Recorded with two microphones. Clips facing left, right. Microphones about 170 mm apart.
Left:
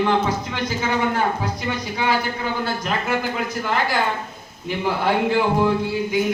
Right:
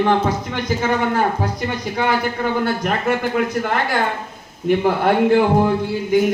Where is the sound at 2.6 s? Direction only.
60° right (ahead or behind).